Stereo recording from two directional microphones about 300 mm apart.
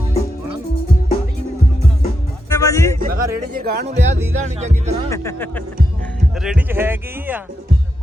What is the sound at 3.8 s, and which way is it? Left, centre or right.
Speech, right.